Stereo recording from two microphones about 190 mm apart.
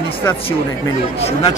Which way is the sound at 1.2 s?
35° left (ahead or behind).